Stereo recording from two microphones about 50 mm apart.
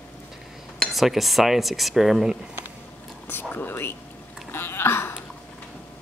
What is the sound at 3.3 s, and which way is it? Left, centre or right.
Speech, left.